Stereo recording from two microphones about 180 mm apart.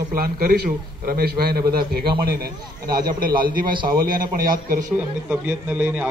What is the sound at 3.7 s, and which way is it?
Speech, 25° right (ahead or behind).